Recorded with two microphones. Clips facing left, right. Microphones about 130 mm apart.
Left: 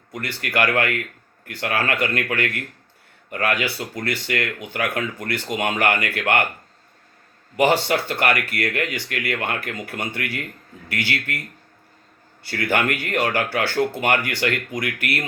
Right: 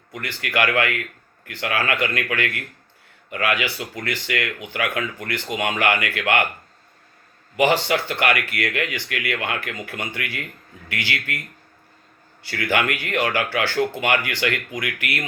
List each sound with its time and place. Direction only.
0.1 s speech: 35° left (ahead or behind)
7.9 s speech: 30° left (ahead or behind)
12.5 s speech: 30° left (ahead or behind)